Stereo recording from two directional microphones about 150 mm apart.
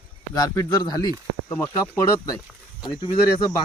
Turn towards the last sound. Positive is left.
turn(degrees=30)  # may be behind; listen again after turning